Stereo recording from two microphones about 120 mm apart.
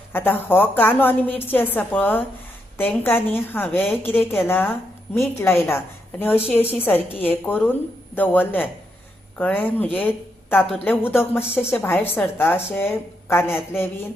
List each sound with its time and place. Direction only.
0.1 s a woman's voice: 15° left (ahead or behind)